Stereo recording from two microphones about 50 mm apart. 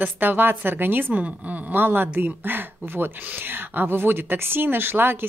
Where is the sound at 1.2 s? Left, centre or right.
Right.